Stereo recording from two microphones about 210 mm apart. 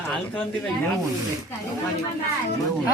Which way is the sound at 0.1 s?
5° left (ahead or behind).